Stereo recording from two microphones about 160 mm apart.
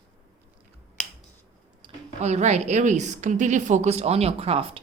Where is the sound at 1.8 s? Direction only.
30° right (ahead or behind).